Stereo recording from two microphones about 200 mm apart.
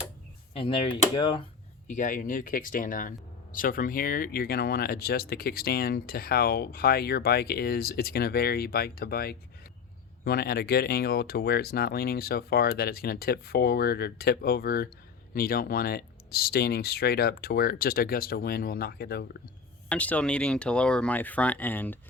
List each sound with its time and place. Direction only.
0.5 s speech: 25° left (ahead or behind)
1.9 s speech: 40° left (ahead or behind)
19.9 s speech: 5° left (ahead or behind)